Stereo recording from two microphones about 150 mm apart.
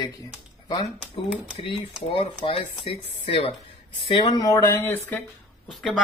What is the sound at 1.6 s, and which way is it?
Speech, 35° left (ahead or behind).